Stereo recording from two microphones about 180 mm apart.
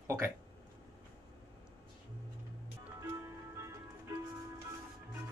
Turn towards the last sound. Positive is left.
turn(degrees=-15)  # may be behind; listen again after turning